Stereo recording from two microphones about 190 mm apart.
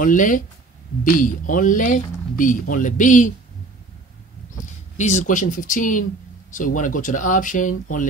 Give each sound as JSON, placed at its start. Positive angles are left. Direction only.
{"t": 0.0, "sound": "speech", "side_deg": 45}
{"t": 4.9, "sound": "speech", "side_deg": 40}